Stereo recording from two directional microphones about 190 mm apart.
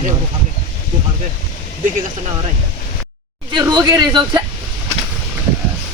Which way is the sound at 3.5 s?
20° right (ahead or behind).